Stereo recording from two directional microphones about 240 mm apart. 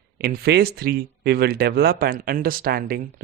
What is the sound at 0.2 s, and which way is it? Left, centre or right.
Speech, right.